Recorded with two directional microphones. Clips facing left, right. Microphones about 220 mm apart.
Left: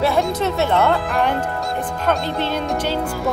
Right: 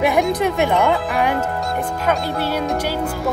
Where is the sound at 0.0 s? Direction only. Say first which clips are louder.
Right 2 dB; 15° right (ahead or behind).